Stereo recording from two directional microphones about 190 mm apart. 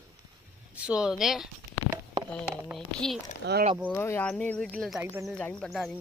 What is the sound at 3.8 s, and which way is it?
Speech, 10° left (ahead or behind).